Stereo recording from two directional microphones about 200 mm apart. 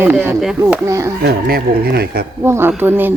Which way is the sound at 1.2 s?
50° right (ahead or behind).